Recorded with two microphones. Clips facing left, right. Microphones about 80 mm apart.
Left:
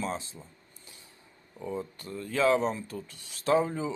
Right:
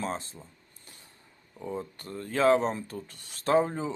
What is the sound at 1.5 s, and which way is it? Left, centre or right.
Speech, right.